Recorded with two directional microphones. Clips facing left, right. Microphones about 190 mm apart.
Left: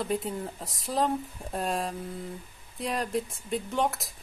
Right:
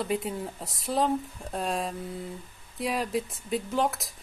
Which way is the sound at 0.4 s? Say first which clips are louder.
Even; centre (ahead or behind).